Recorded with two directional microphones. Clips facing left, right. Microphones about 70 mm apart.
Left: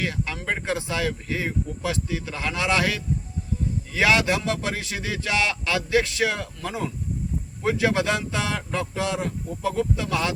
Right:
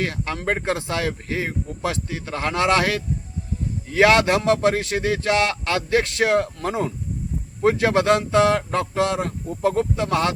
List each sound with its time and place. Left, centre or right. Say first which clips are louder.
0.0 s speech: right 3 dB; right